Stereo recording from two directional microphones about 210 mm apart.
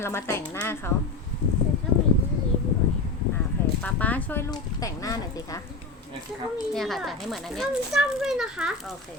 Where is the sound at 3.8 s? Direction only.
5° left (ahead or behind).